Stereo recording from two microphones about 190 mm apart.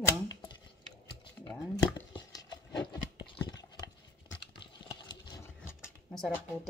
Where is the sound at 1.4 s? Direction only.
20° left (ahead or behind).